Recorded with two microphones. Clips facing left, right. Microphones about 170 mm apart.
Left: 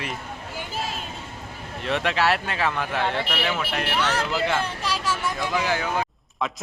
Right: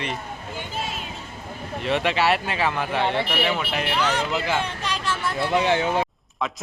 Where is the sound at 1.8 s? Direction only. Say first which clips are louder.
Right 1 dB; centre (ahead or behind).